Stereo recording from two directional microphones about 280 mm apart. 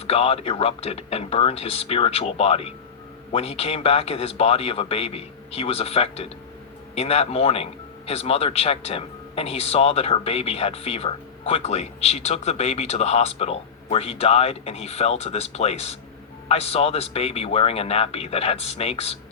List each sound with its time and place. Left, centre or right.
0.1 s a man's voice: left